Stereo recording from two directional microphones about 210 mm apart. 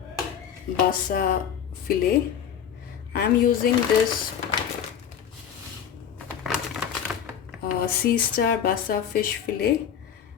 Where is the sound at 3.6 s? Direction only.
45° left (ahead or behind).